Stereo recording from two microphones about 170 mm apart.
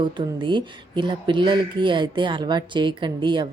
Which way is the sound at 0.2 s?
30° right (ahead or behind).